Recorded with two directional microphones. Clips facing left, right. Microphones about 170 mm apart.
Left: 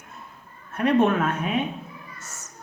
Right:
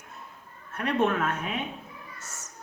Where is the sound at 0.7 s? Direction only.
15° left (ahead or behind).